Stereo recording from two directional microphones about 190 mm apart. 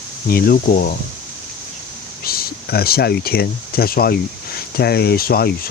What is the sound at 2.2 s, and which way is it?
Speech, 55° left (ahead or behind).